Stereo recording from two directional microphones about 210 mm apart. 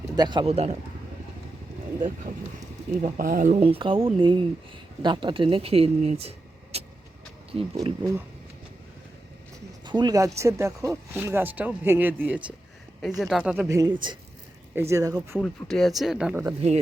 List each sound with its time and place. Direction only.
0.2 s speech: 20° right (ahead or behind)
3.0 s speech: 40° right (ahead or behind)
3.6 s speech: 25° right (ahead or behind)
9.8 s speech: 20° right (ahead or behind)
15.4 s speech: 5° left (ahead or behind)